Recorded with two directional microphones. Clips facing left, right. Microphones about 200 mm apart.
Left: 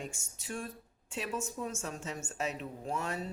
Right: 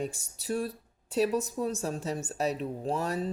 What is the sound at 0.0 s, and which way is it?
Speech, 35° right (ahead or behind).